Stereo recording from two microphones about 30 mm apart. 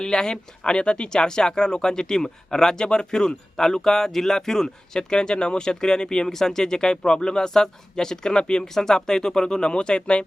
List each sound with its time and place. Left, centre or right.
0.0 s speech: left
6.2 s speech: centre
8.6 s speech: centre; by 10.2 s left